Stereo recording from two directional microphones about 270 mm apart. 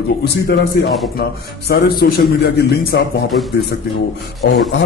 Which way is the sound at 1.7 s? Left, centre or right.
Left.